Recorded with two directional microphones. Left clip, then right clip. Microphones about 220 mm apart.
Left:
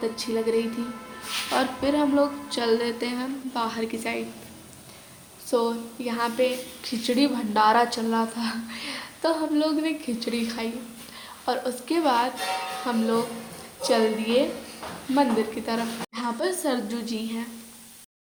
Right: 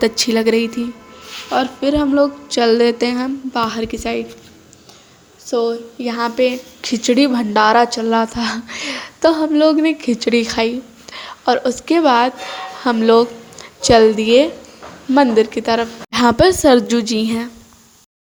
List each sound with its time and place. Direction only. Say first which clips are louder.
0.0 s a woman's voice: right 11 dB; 45° right (ahead or behind)
1.5 s speech: right 8 dB; 20° right (ahead or behind)
5.5 s a woman's voice: right 7 dB; 15° right (ahead or behind); by 17.5 s 35° right (ahead or behind)